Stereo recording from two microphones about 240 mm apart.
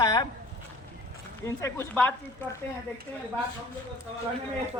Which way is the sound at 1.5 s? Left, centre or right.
Centre.